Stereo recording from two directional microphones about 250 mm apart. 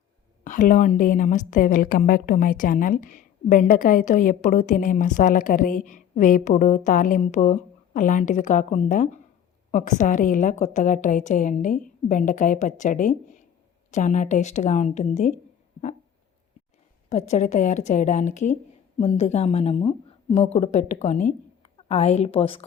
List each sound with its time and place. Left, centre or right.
0.4 s a woman's voice: left
17.1 s speech: left